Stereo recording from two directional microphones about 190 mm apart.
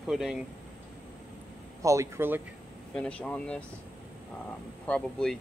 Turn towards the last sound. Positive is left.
turn(degrees=5)  # may be behind; listen again after turning